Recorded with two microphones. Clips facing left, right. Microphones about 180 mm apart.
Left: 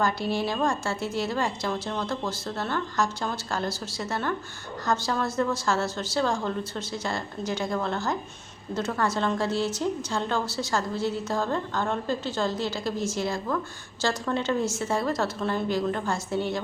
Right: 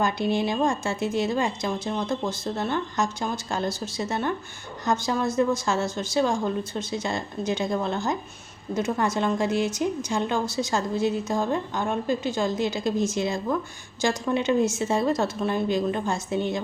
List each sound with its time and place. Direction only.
0.0 s a woman's voice: 20° right (ahead or behind)